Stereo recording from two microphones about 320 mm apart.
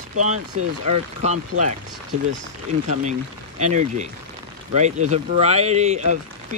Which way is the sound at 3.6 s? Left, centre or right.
Right.